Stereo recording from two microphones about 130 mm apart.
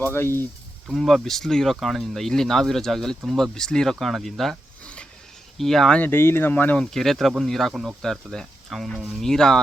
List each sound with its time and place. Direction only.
0.0 s speech: 15° left (ahead or behind)
0.9 s speech: centre (ahead or behind)
6.0 s speech: 15° left (ahead or behind)